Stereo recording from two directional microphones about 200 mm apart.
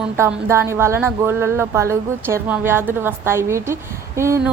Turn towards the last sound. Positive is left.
turn(degrees=-15)  # may be behind; listen again after turning